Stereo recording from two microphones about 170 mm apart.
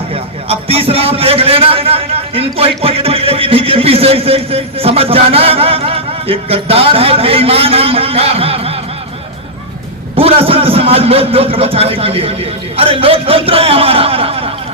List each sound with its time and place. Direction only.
0.1 s a man's voice: 35° right (ahead or behind)
10.2 s a man's voice: 35° right (ahead or behind)